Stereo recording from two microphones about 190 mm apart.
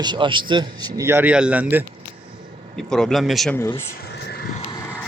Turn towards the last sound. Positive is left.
turn(degrees=0)  # may be behind; listen again after turning